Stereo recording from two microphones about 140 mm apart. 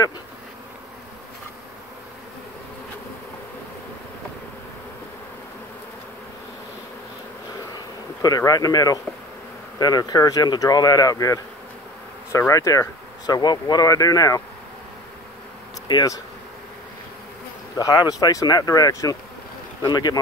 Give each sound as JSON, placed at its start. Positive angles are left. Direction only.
{"t": 7.7, "sound": "bee", "side_deg": 25}
{"t": 9.8, "sound": "speech", "side_deg": 30}
{"t": 15.9, "sound": "speech", "side_deg": 30}
{"t": 17.7, "sound": "speech", "side_deg": 25}